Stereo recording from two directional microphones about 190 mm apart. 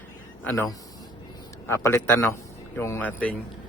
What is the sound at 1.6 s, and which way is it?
Speech, 15° left (ahead or behind).